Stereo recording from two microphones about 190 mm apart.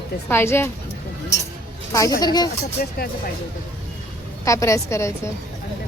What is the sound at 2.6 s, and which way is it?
Speech, 55° left (ahead or behind).